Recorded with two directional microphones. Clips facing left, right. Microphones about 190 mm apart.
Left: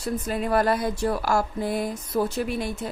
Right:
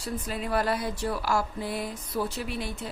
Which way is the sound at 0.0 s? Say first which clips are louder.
Left 6 dB; 50° left (ahead or behind).